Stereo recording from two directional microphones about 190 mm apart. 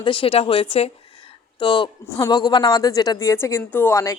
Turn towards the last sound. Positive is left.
turn(degrees=15)  # may be behind; listen again after turning